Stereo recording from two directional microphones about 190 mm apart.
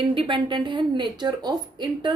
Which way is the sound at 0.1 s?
25° right (ahead or behind).